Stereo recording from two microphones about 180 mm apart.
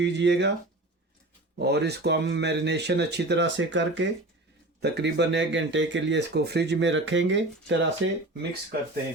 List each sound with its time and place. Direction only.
0.0 s speech: 75° right (ahead or behind)
1.5 s speech: 65° right (ahead or behind); by 4.1 s 90° right
4.8 s speech: 70° right (ahead or behind); by 8.2 s 90° right